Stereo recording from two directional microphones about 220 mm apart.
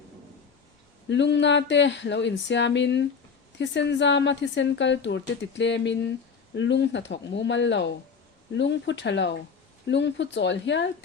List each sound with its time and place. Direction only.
1.1 s a woman's voice: 55° left (ahead or behind)